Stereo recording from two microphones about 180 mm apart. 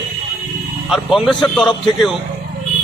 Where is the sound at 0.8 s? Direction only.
Centre (ahead or behind).